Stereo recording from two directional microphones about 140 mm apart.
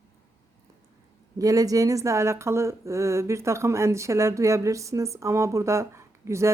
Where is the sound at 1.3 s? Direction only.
25° right (ahead or behind).